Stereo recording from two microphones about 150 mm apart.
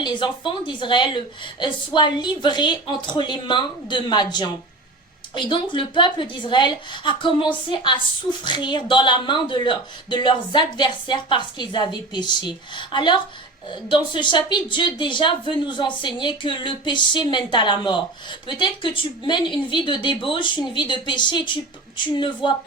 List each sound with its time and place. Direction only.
0.0 s a woman's voice: 30° left (ahead or behind)